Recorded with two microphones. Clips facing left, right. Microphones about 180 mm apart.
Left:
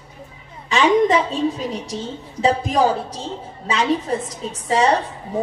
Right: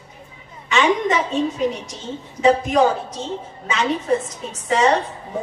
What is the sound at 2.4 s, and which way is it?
A woman's voice, 35° left (ahead or behind).